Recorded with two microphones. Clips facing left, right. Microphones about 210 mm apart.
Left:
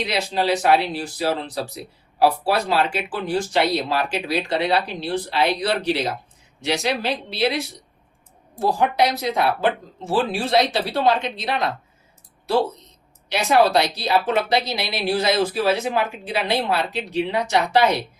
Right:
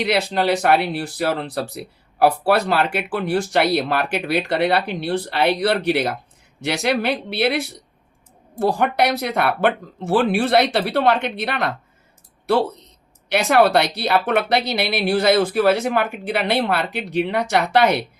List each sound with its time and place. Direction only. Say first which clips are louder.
0.0 s speech: right 3 dB; 60° right (ahead or behind)
13.2 s speech: right 2 dB; 60° right (ahead or behind)